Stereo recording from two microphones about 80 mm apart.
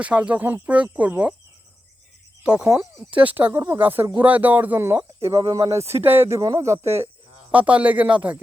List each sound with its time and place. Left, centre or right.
0.0 s speech: centre
2.4 s speech: centre; by 5.4 s right
5.4 s speech: right
5.7 s speech: right
7.5 s speech: centre